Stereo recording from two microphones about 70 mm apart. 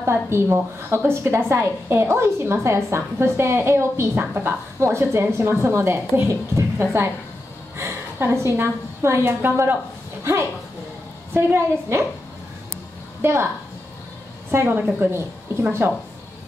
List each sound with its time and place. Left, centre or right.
0.0 s a woman's voice: right
11.3 s a woman's voice: right
13.2 s a woman's voice: right
14.5 s a woman's voice: right